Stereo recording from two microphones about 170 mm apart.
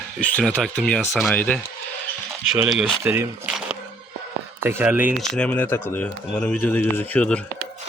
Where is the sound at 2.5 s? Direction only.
5° right (ahead or behind).